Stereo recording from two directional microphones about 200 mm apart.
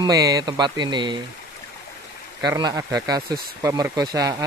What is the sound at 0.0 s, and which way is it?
Speech, 15° right (ahead or behind).